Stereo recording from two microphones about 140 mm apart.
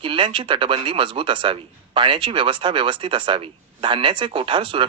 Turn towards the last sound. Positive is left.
turn(degrees=-35)  # may be behind; listen again after turning